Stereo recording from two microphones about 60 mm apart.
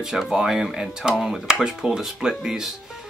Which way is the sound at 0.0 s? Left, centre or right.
Centre.